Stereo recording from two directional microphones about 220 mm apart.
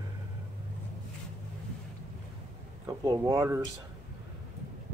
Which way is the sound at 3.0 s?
15° right (ahead or behind).